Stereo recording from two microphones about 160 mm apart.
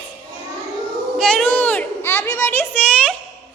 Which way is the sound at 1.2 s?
5° left (ahead or behind).